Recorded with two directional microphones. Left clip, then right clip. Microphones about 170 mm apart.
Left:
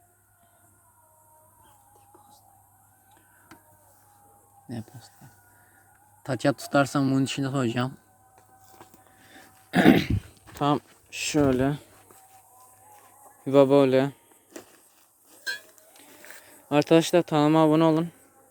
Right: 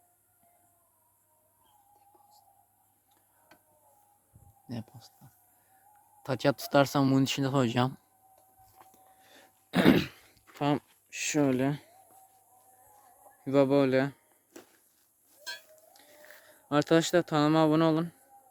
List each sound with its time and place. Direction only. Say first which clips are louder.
4.7 s speech: left 3 dB; 30° right (ahead or behind)
6.2 s speech: left 3 dB; 25° right (ahead or behind)
8.7 s a sound: left 7 dB; 45° left (ahead or behind)
9.3 s throat clearing: left 5 dB; 15° right (ahead or behind)
10.6 s speech: left 5 dB; 20° right (ahead or behind)
13.4 s speech: left 6 dB; 10° right (ahead or behind)
14.5 s walk: left 7 dB; 20° left (ahead or behind)
16.4 s speech: left 5 dB; 15° right (ahead or behind)